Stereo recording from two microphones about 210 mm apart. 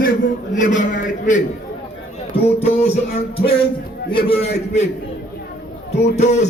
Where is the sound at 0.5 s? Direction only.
35° left (ahead or behind).